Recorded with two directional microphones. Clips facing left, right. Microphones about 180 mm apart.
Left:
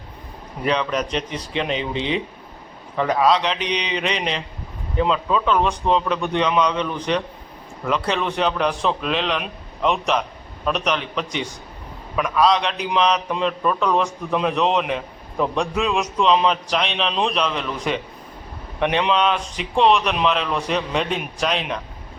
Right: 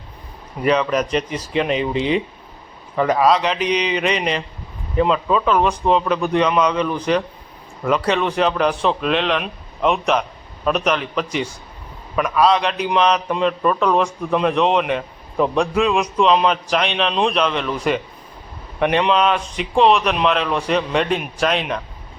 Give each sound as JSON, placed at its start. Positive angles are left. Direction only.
{"t": 0.6, "sound": "a man's voice", "side_deg": -5}